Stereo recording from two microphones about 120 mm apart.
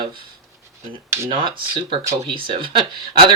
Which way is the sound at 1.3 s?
45° right (ahead or behind).